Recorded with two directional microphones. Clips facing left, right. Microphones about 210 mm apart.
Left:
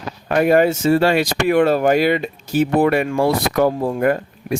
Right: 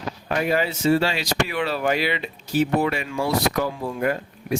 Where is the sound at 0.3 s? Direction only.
55° left (ahead or behind).